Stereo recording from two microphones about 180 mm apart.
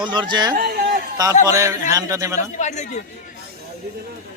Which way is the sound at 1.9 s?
15° right (ahead or behind).